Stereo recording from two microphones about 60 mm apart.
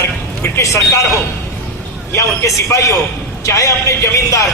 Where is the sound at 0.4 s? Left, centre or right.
Left.